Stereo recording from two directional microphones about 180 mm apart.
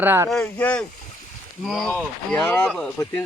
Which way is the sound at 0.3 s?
5° left (ahead or behind).